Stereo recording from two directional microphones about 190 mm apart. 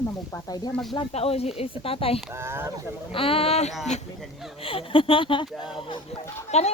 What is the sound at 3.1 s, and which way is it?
A woman's voice, 30° left (ahead or behind).